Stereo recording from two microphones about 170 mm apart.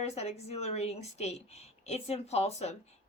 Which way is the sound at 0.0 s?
40° left (ahead or behind).